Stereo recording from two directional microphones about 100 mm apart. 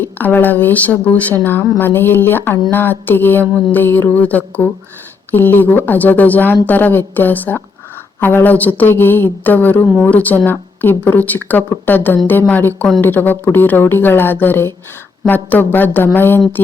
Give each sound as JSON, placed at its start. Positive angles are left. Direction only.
{"t": 0.0, "sound": "speech", "side_deg": 20}